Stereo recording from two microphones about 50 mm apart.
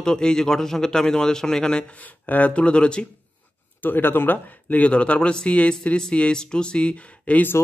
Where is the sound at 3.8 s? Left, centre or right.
Left.